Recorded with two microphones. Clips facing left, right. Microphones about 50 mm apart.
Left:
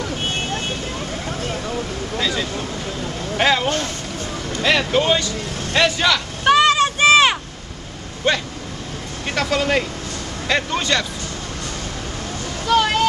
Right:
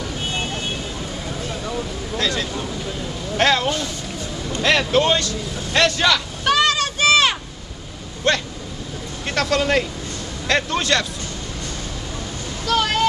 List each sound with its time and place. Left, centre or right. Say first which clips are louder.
2.1 s vehicle: even; centre
3.3 s a sound: even; centre
3.6 s vehicle: left 1 dB; left
4.6 s vehicle: even; centre
6.4 s a sound: left 5 dB; left
8.3 s vehicle: even; centre
12.6 s boat: left 3 dB; centre